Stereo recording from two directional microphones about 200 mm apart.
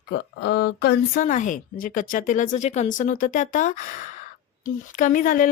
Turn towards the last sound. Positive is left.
turn(degrees=45)  # may be behind; listen again after turning